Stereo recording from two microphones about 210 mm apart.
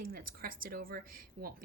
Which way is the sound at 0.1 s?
45° right (ahead or behind).